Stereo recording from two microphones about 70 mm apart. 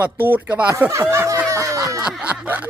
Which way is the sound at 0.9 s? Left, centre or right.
Right.